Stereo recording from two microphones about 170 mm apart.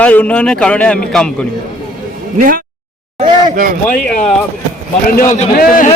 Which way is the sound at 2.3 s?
55° right (ahead or behind).